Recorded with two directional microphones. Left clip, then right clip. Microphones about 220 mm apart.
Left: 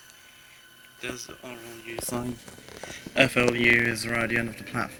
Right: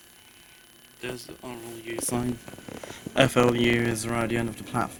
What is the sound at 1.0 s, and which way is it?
Speech, 30° right (ahead or behind).